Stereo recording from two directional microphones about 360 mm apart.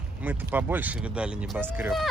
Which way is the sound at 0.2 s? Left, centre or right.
Centre.